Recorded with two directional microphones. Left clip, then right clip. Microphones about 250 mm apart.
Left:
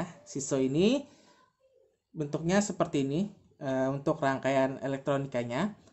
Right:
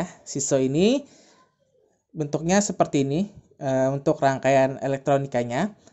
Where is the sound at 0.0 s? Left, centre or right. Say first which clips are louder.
Right 8 dB; right.